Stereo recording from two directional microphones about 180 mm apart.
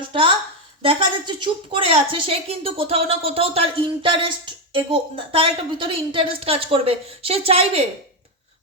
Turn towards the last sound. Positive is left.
turn(degrees=-35)  # may be behind; listen again after turning